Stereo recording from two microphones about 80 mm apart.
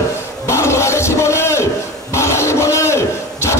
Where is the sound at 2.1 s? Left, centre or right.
Left.